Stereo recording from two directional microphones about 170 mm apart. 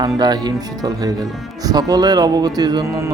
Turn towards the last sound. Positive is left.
turn(degrees=-15)  # may be behind; listen again after turning